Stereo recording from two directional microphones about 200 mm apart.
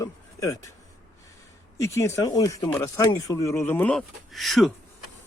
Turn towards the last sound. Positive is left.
turn(degrees=0)  # may be behind; listen again after turning